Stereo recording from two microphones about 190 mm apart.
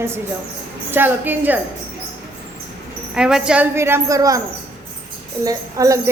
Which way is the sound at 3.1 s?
5° right (ahead or behind).